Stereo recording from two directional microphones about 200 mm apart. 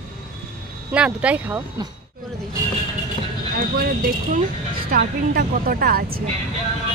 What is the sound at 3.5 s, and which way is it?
A woman's voice, 45° right (ahead or behind).